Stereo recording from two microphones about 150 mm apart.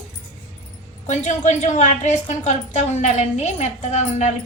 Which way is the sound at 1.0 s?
55° left (ahead or behind).